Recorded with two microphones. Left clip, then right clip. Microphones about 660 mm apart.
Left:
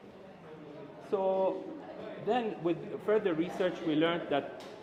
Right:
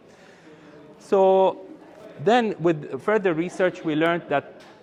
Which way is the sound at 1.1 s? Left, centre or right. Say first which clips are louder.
Right 13 dB; right.